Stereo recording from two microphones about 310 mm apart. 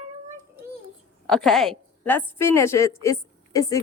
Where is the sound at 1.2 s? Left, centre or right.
Centre.